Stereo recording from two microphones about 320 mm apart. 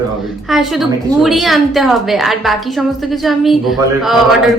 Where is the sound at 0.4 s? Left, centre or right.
Centre.